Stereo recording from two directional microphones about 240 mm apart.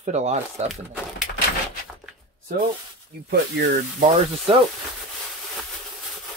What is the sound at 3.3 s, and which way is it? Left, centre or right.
Speech, right.